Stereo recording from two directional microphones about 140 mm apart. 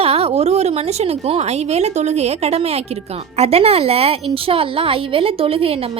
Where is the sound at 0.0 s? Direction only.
45° right (ahead or behind).